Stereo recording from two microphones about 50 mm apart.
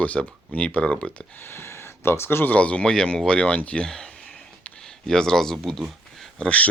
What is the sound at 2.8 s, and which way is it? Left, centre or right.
Speech, centre.